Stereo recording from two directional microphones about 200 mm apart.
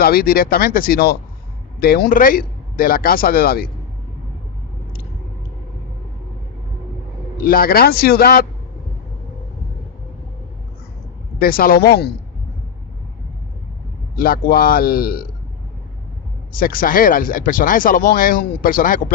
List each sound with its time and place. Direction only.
0.0 s speech: 50° left (ahead or behind)
7.3 s speech: 45° left (ahead or behind)
11.3 s speech: 45° left (ahead or behind)
14.2 s speech: 45° left (ahead or behind)
16.6 s speech: 45° left (ahead or behind)